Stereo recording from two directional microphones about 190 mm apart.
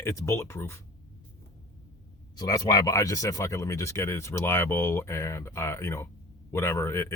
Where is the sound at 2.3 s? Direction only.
20° left (ahead or behind).